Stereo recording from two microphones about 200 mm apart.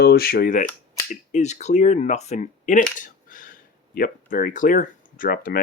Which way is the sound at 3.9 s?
45° left (ahead or behind).